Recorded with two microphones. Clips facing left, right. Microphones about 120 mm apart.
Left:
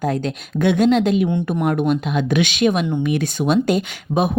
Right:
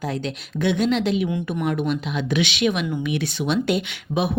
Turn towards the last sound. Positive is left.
turn(degrees=45)  # may be behind; listen again after turning